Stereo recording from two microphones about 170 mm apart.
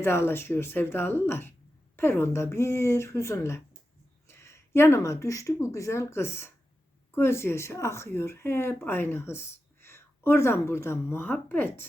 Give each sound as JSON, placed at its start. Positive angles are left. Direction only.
{"t": 0.0, "sound": "speech", "side_deg": 15}